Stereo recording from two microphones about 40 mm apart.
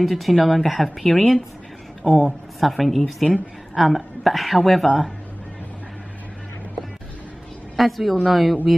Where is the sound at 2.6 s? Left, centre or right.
Centre.